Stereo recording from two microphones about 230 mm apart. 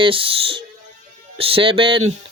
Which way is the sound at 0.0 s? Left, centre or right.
Right.